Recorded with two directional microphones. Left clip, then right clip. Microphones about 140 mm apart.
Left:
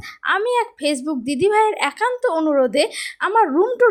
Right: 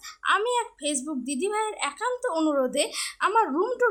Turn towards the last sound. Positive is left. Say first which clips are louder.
# left 6 dB
turn(degrees=25)  # may be behind; listen again after turning